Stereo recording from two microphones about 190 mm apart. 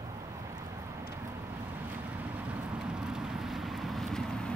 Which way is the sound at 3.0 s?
5° right (ahead or behind).